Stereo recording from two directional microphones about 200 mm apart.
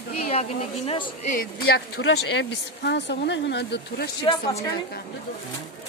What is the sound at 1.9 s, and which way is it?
Speech, 60° left (ahead or behind).